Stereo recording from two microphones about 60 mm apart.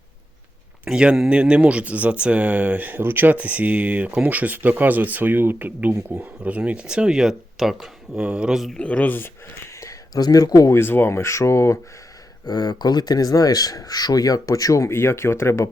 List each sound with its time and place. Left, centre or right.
0.9 s speech: centre
8.2 s speech: centre
8.7 s speech: left
9.8 s speech: left
10.7 s speech: left
12.5 s speech: left
14.9 s speech: left